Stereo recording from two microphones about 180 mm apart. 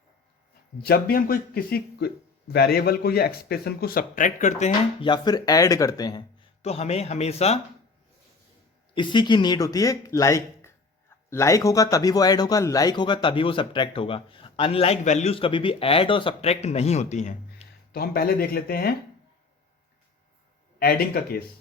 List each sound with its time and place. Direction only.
0.8 s speech: 55° left (ahead or behind); by 5.0 s 40° left (ahead or behind)
5.0 s speech: 25° left (ahead or behind)
6.6 s speech: 35° left (ahead or behind)
9.0 s speech: 25° left (ahead or behind)
17.6 s a sound: 35° left (ahead or behind)
17.9 s speech: 55° left (ahead or behind)
20.7 s speech: 55° left (ahead or behind)